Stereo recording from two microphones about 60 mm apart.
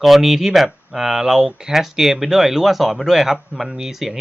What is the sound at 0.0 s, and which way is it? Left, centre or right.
Speech, centre.